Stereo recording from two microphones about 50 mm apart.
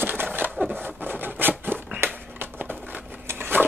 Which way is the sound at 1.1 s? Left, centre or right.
Right.